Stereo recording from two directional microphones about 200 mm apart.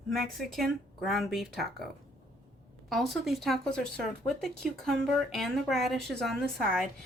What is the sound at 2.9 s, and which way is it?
Speech, centre (ahead or behind).